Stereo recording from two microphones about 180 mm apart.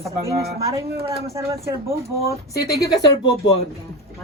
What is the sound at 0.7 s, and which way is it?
Speech, 15° right (ahead or behind).